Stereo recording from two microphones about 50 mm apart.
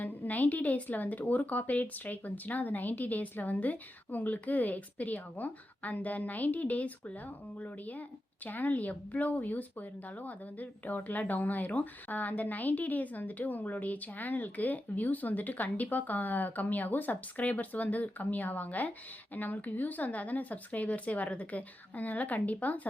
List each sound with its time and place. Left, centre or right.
0.0 s a woman's voice: left